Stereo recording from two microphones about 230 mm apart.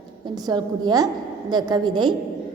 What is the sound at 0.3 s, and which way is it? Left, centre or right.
A woman's voice, centre.